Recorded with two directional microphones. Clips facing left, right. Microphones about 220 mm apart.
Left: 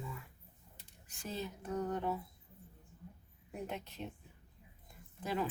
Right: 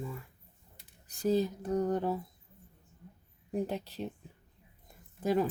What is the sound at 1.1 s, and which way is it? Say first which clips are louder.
Speech: right 14 dB; 35° right (ahead or behind).